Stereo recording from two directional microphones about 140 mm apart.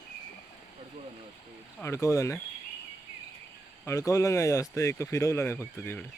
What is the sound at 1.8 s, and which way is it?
Speech, 20° left (ahead or behind).